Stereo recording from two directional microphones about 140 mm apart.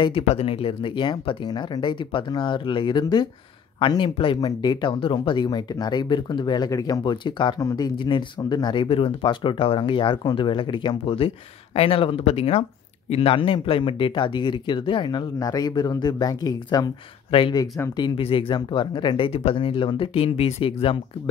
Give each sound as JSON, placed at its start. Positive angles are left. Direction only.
{"t": 0.0, "sound": "speech", "side_deg": 45}
{"t": 17.3, "sound": "speech", "side_deg": 40}
{"t": 17.6, "sound": "speech", "side_deg": 20}
{"t": 17.9, "sound": "speech", "side_deg": 35}